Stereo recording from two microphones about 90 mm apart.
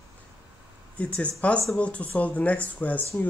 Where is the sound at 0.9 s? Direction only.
15° left (ahead or behind).